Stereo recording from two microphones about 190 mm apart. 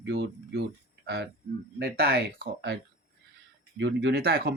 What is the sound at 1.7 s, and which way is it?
Speech, 55° right (ahead or behind).